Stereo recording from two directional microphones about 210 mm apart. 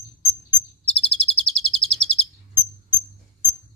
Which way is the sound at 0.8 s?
30° left (ahead or behind).